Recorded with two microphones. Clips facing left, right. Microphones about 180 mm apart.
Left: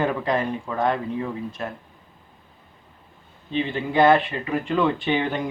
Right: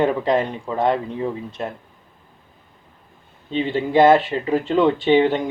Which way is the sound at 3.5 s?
25° right (ahead or behind).